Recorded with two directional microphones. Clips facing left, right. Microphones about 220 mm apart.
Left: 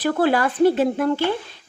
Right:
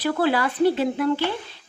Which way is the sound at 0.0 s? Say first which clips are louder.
Left 3 dB; 50° left (ahead or behind).